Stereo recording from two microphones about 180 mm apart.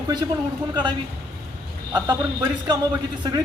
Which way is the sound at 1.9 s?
20° right (ahead or behind).